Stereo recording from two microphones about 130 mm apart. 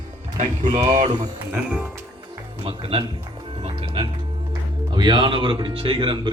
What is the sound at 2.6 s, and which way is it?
Speech, 40° right (ahead or behind).